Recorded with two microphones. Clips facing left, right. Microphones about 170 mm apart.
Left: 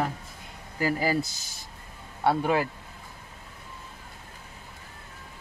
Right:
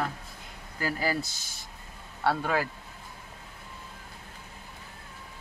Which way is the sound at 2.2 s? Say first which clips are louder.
Left 3 dB; 15° left (ahead or behind).